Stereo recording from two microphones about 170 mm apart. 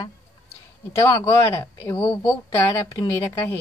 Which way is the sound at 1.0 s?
15° left (ahead or behind).